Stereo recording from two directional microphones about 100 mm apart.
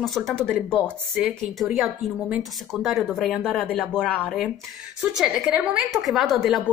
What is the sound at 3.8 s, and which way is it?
Speech, 10° left (ahead or behind).